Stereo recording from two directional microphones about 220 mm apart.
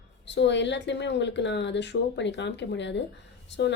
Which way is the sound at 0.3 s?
55° left (ahead or behind).